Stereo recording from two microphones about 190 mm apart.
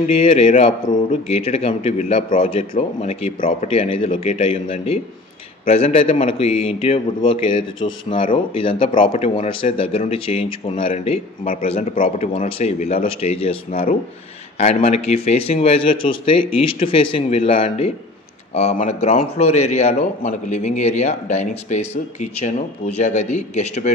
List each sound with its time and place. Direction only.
0.1 s a man's voice: 30° left (ahead or behind)